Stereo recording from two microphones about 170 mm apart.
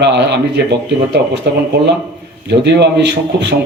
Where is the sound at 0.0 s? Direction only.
90° right.